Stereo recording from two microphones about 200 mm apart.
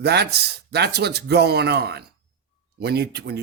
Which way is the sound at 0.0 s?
55° right (ahead or behind).